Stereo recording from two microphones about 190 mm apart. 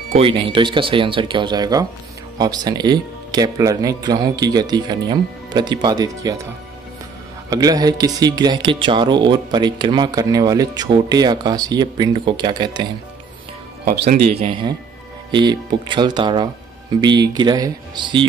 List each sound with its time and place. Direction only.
0.1 s speech: 30° right (ahead or behind)
7.4 s speech: 20° right (ahead or behind)
14.4 s speech: 25° right (ahead or behind)